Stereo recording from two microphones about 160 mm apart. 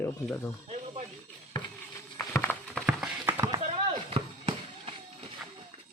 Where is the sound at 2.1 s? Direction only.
15° left (ahead or behind).